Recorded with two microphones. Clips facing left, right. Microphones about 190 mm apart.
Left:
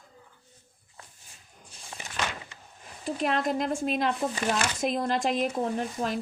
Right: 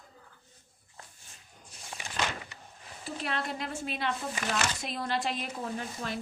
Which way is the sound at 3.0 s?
45° left (ahead or behind).